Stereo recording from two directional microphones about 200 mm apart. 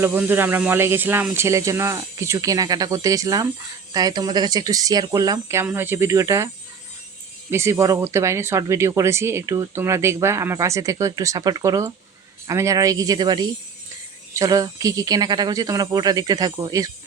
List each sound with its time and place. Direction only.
0.0 s speech: 10° right (ahead or behind)
7.5 s speech: 15° right (ahead or behind)